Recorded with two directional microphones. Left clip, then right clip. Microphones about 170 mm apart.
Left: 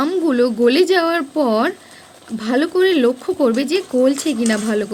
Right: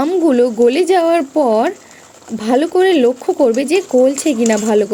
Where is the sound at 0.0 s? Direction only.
10° right (ahead or behind).